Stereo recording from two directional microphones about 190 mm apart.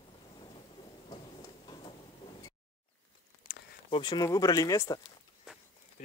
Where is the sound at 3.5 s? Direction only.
45° left (ahead or behind).